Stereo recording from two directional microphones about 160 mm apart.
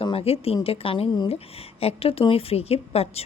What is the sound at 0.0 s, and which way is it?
A woman's voice, 35° left (ahead or behind).